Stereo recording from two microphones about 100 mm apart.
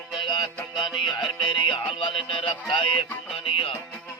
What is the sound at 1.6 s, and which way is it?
Music, 60° left (ahead or behind).